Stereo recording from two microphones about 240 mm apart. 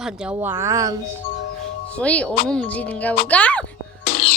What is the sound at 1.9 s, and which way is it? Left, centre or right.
A woman's voice, centre.